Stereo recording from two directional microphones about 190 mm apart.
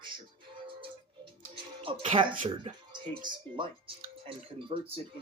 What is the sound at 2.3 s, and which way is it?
Speech, 45° right (ahead or behind).